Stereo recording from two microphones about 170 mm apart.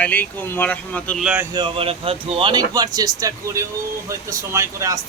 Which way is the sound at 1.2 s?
5° right (ahead or behind).